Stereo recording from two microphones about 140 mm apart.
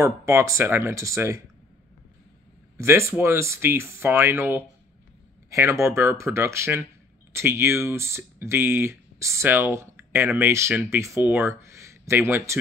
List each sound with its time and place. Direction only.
0.0 s speech: 20° right (ahead or behind)
2.8 s speech: 20° right (ahead or behind)